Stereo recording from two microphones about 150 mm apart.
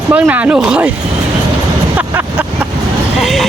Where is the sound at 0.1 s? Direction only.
10° right (ahead or behind).